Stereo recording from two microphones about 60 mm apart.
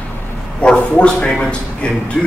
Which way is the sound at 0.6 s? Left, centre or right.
Centre.